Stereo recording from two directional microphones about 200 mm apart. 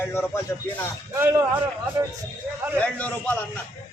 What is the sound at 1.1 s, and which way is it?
Speech, 15° right (ahead or behind).